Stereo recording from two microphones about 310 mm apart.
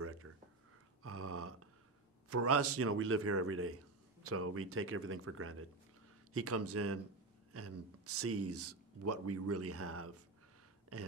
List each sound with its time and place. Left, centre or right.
0.0 s a sound: right
1.0 s burping: right
2.2 s speech: right